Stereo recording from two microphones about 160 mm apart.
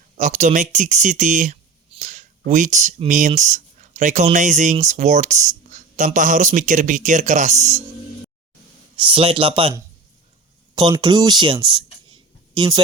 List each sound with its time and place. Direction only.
0.2 s speech: 50° right (ahead or behind)
9.0 s speech: 35° right (ahead or behind)
10.8 s speech: 25° right (ahead or behind)